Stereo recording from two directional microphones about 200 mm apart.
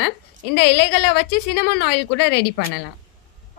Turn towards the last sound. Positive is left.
turn(degrees=55)  # may be behind; listen again after turning